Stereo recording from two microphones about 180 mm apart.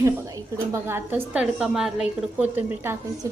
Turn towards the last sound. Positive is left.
turn(degrees=-15)  # may be behind; listen again after turning